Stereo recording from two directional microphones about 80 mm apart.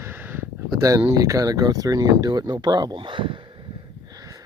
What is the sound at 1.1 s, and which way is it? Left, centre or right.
Speech, right.